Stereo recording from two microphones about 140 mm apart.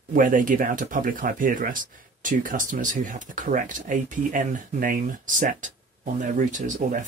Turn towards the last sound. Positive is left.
turn(degrees=-65)  # may be behind; listen again after turning